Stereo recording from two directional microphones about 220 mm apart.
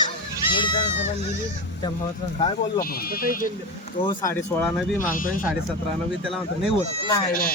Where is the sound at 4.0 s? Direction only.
15° left (ahead or behind).